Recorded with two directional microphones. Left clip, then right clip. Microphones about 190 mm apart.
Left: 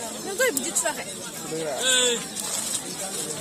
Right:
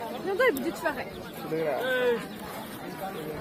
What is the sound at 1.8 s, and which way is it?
Speech, 30° right (ahead or behind).